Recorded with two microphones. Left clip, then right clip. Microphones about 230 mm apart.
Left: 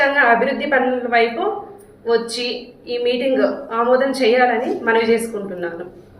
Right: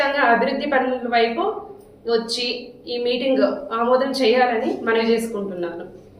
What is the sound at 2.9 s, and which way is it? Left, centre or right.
A woman's voice, centre.